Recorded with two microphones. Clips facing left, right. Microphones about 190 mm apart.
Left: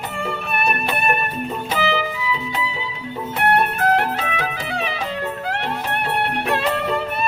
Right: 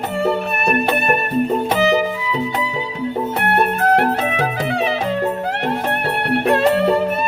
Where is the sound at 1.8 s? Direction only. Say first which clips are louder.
Right 4 dB; 45° right (ahead or behind).